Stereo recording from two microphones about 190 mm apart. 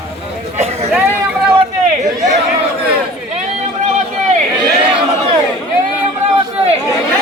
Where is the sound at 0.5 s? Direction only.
35° right (ahead or behind).